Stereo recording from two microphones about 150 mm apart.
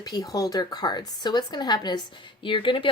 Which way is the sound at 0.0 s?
25° left (ahead or behind).